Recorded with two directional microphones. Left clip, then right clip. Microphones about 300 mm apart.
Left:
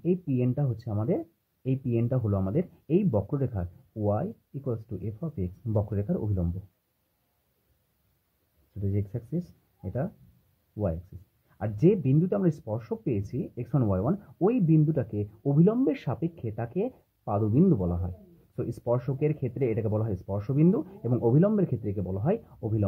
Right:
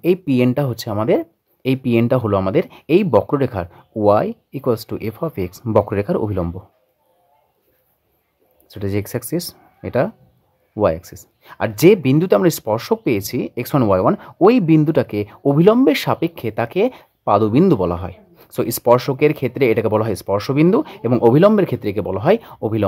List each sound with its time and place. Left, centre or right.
0.0 s speech: right
8.9 s speech: right
11.4 s speech: right